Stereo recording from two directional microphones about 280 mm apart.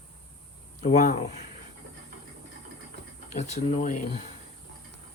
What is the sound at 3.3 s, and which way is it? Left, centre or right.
Speech, left.